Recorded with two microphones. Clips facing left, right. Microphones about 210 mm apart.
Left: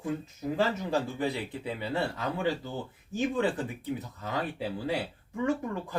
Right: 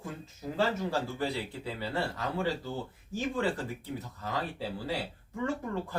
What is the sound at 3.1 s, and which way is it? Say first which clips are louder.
Speech: left 3 dB; 20° left (ahead or behind).